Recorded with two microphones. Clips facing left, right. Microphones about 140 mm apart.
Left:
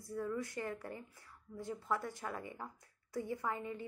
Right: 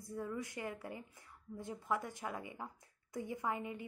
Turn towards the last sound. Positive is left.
turn(degrees=-15)  # may be behind; listen again after turning